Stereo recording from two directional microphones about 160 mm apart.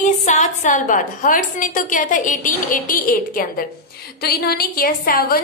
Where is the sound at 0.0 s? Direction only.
50° left (ahead or behind); by 3.6 s 65° left (ahead or behind).